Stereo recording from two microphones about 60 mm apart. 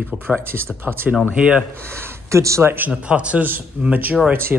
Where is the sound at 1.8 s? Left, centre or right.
Right.